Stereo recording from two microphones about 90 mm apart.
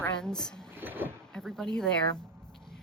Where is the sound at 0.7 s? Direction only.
20° right (ahead or behind).